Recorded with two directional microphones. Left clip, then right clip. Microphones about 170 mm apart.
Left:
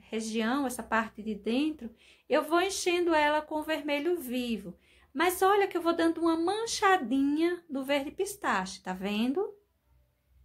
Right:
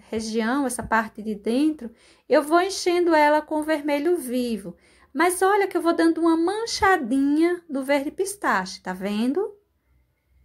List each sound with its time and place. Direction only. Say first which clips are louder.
0.1 s a woman's voice: right 6 dB; 25° right (ahead or behind)